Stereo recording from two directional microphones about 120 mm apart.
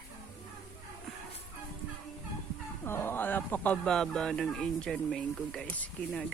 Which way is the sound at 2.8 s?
20° left (ahead or behind).